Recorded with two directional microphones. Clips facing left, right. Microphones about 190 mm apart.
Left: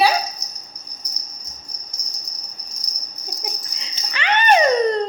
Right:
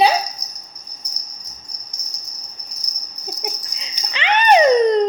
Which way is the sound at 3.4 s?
20° right (ahead or behind).